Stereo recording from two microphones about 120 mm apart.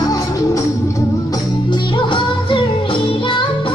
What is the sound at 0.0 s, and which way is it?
Music, 30° left (ahead or behind).